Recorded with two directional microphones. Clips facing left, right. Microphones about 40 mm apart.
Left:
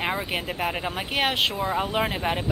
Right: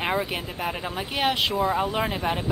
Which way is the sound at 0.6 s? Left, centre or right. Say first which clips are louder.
Left 2 dB; centre.